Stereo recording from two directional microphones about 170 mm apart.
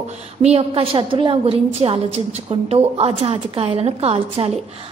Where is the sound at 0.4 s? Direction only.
40° right (ahead or behind).